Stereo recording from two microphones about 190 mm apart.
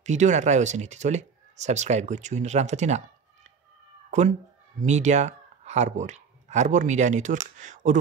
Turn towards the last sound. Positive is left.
turn(degrees=-40)  # may be behind; listen again after turning